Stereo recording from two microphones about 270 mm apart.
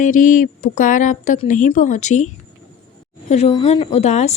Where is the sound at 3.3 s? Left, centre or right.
Left.